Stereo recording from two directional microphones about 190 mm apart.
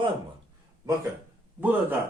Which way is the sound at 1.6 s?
10° right (ahead or behind).